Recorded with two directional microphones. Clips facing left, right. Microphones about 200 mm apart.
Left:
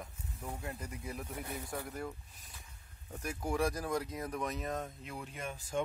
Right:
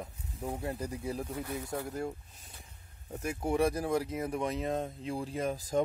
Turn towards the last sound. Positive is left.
turn(degrees=-35)  # may be behind; listen again after turning